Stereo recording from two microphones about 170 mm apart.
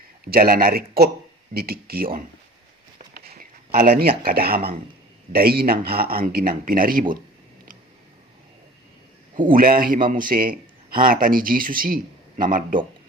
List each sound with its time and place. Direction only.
0.3 s speech: 55° right (ahead or behind)
3.2 s a sound: 55° right (ahead or behind)
4.2 s speech: 60° right (ahead or behind)
9.3 s speech: 50° right (ahead or behind)